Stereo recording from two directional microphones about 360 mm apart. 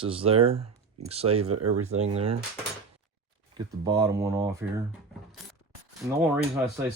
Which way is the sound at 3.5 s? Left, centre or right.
Centre.